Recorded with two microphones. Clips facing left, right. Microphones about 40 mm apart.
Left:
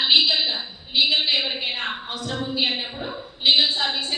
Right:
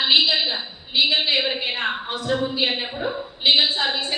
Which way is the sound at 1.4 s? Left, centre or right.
Centre.